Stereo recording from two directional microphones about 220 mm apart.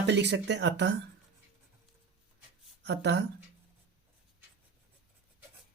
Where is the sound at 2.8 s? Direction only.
50° right (ahead or behind).